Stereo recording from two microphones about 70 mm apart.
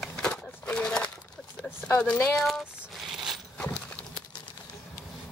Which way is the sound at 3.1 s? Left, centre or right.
Centre.